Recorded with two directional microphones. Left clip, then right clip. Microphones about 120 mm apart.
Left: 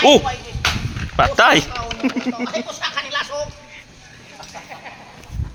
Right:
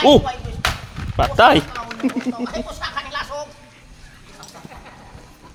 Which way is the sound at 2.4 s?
40° right (ahead or behind).